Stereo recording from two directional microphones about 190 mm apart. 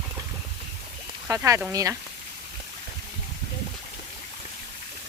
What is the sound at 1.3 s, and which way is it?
Speech, 15° right (ahead or behind).